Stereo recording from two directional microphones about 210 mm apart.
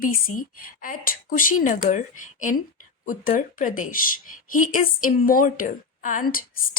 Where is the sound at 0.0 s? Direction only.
40° left (ahead or behind).